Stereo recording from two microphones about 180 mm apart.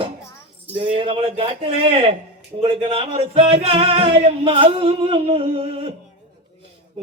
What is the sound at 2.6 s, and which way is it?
Music, 30° right (ahead or behind).